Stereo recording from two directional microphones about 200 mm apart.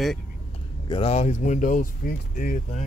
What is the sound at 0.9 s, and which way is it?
Speech, 30° left (ahead or behind).